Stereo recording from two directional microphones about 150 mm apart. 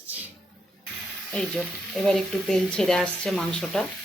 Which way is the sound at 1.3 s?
5° left (ahead or behind).